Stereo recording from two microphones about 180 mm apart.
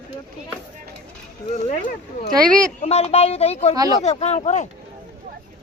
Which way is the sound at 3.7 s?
20° right (ahead or behind).